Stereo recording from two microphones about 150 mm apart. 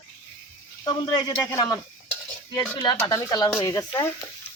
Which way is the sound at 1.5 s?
20° left (ahead or behind).